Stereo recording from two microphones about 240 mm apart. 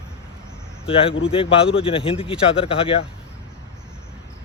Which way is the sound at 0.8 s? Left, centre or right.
Left.